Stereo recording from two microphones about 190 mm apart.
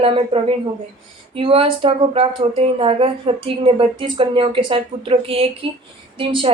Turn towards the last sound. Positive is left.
turn(degrees=-30)  # may be behind; listen again after turning